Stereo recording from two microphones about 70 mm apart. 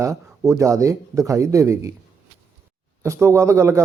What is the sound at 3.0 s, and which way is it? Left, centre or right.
Speech, right.